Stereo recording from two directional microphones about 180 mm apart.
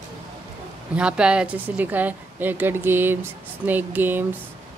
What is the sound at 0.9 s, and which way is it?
A woman's voice, 5° right (ahead or behind).